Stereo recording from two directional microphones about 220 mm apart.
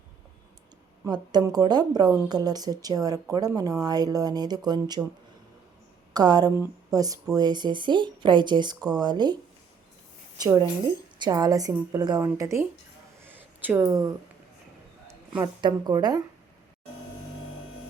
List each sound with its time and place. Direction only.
1.0 s speech: 20° right (ahead or behind)
6.1 s speech: 15° right (ahead or behind)
11.2 s speech: 15° right (ahead or behind)
13.2 s a sound: 10° right (ahead or behind)
15.0 s speech: 15° right (ahead or behind)